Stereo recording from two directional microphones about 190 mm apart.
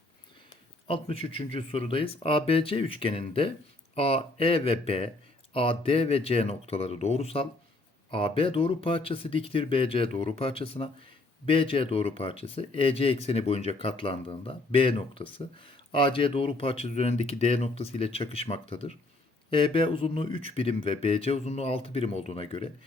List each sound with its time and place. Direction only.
0.9 s speech: 30° left (ahead or behind)